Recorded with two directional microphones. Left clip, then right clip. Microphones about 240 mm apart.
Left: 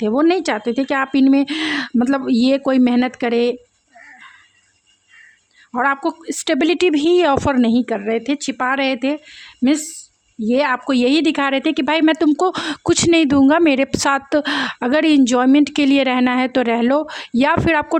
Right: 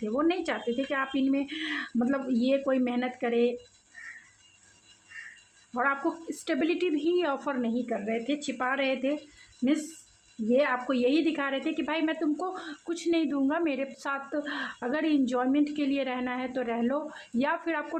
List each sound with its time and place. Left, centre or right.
0.0 s a woman's voice: left
5.7 s a woman's voice: left
10.5 s a woman's voice: left